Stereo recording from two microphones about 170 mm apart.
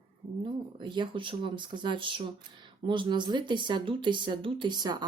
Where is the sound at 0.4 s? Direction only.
30° right (ahead or behind).